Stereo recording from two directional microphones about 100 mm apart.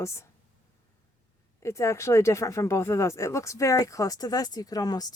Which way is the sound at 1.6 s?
30° left (ahead or behind).